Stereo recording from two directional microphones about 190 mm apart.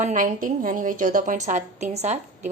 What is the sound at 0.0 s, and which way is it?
A woman's voice, 45° right (ahead or behind).